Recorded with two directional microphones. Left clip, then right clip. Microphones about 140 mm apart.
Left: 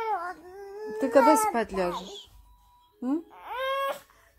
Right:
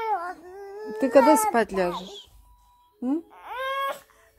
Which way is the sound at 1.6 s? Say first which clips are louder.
Right 4 dB; 80° right.